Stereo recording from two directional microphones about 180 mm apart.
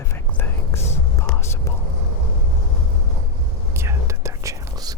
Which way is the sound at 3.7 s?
15° right (ahead or behind).